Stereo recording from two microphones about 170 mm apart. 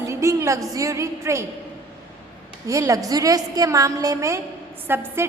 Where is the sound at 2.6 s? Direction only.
20° right (ahead or behind).